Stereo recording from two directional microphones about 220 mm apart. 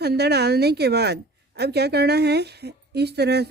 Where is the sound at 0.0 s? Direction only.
45° right (ahead or behind).